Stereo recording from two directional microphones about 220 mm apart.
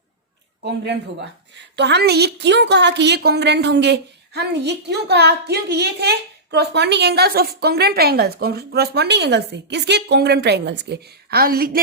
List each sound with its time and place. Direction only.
0.6 s a woman's voice: 50° right (ahead or behind)